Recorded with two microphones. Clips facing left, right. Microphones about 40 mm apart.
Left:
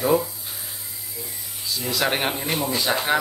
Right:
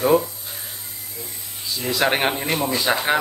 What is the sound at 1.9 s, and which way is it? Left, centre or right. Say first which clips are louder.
Speech: right 4 dB; centre.